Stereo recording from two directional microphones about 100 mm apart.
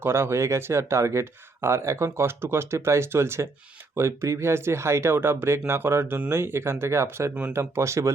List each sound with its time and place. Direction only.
0.0 s speech: 25° right (ahead or behind)